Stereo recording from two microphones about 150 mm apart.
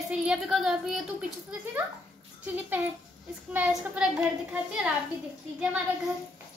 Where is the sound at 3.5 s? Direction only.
10° right (ahead or behind).